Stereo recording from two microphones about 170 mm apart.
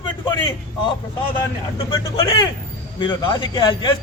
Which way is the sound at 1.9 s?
25° left (ahead or behind).